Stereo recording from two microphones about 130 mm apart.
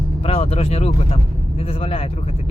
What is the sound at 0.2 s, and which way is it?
Speech, 50° left (ahead or behind).